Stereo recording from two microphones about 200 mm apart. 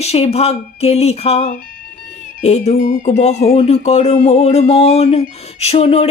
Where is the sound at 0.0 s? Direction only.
30° left (ahead or behind).